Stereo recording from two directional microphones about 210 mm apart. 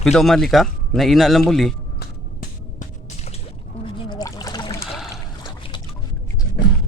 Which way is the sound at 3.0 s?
30° left (ahead or behind).